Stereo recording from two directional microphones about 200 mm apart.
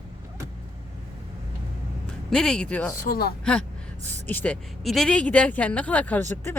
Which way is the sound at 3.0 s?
50° left (ahead or behind).